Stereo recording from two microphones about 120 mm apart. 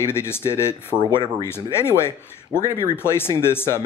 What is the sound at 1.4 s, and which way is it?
Speech, 20° left (ahead or behind).